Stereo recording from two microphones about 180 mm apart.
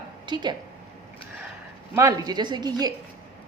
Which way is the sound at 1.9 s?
15° right (ahead or behind).